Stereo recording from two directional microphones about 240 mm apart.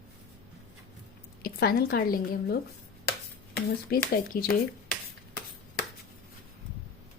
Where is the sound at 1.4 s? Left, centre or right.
Left.